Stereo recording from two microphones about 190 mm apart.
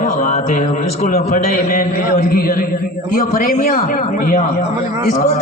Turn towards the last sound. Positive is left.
turn(degrees=45)  # may be behind; listen again after turning